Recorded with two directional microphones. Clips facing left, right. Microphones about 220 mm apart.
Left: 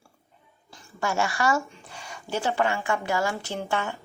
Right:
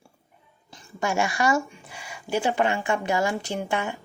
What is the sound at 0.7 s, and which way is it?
A woman's voice, 15° right (ahead or behind).